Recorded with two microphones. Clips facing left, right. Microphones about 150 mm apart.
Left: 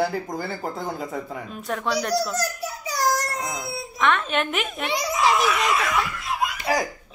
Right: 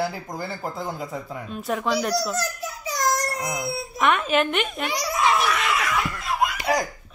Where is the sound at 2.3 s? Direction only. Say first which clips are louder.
Left 1 dB; 35° left (ahead or behind).